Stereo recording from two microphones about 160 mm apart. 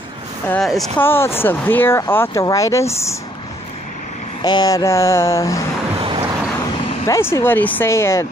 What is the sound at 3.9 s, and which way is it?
Vehicle, 50° left (ahead or behind).